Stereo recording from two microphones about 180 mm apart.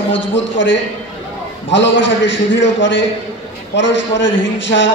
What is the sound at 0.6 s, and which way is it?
A man's voice, 90° left.